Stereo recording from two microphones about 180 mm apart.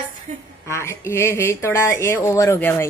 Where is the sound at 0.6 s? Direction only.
15° left (ahead or behind).